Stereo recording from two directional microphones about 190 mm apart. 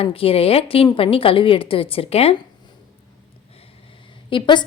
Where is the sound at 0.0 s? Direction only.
30° left (ahead or behind).